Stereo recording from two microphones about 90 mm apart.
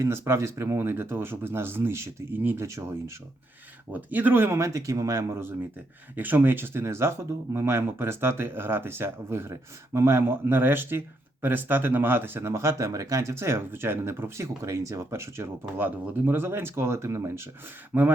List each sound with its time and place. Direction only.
0.0 s speech: 30° right (ahead or behind)
3.9 s speech: 20° right (ahead or behind)